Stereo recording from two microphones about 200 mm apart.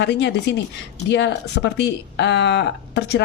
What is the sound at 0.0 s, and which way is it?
Speech, 60° left (ahead or behind).